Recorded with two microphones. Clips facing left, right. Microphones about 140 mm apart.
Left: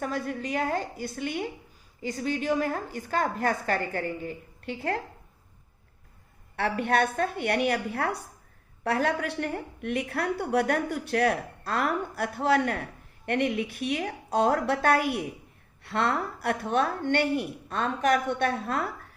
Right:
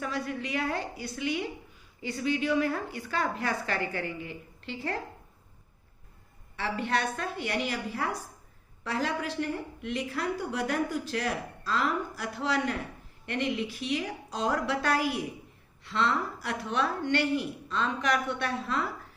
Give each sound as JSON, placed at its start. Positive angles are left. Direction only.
{"t": 0.0, "sound": "a woman's voice", "side_deg": 45}
{"t": 6.6, "sound": "a woman's voice", "side_deg": 60}